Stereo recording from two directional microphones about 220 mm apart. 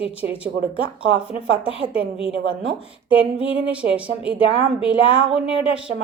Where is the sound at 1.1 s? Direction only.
25° left (ahead or behind).